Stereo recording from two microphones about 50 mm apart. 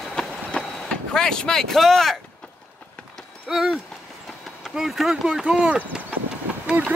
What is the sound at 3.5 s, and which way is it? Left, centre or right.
Speech, centre.